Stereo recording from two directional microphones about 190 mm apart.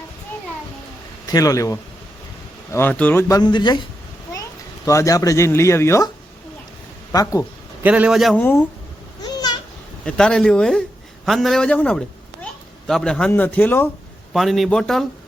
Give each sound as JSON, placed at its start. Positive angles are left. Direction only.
{"t": 1.3, "sound": "speech", "side_deg": 20}
{"t": 4.9, "sound": "speech", "side_deg": 15}
{"t": 7.1, "sound": "speech", "side_deg": 20}
{"t": 7.8, "sound": "a man's voice", "side_deg": -10}
{"t": 8.4, "sound": "speech", "side_deg": 10}
{"t": 9.2, "sound": "a sound", "side_deg": 20}
{"t": 10.1, "sound": "speech", "side_deg": 5}